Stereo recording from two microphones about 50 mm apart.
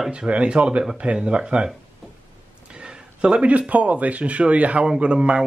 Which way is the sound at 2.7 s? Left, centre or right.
Centre.